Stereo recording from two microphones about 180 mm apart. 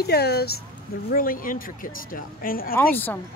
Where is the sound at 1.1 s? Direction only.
50° left (ahead or behind).